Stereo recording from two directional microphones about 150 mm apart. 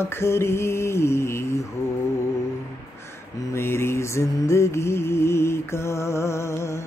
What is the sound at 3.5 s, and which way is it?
Mantra, 15° left (ahead or behind).